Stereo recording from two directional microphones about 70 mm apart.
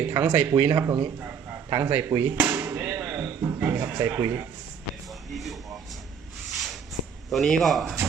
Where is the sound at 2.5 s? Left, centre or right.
Right.